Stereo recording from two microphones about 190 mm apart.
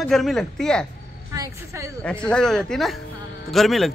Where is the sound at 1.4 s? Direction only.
15° right (ahead or behind).